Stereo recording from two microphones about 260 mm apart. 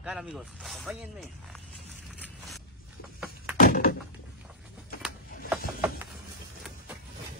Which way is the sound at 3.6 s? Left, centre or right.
Left.